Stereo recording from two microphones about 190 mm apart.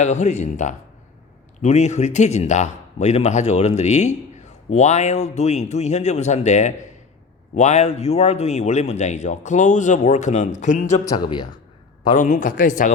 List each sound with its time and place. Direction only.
0.0 s speech: 35° left (ahead or behind)
11.0 s speech: 20° left (ahead or behind)
12.1 s a man's voice: 45° left (ahead or behind)